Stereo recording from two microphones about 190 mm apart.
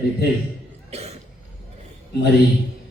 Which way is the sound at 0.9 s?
35° right (ahead or behind).